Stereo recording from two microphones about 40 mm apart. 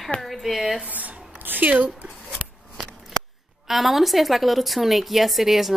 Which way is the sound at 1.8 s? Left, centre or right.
Centre.